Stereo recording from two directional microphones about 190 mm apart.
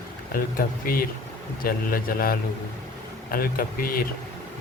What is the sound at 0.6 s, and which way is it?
Speech, 50° left (ahead or behind).